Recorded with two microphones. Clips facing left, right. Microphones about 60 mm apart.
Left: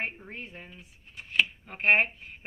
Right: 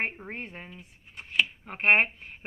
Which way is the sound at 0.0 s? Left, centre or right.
Right.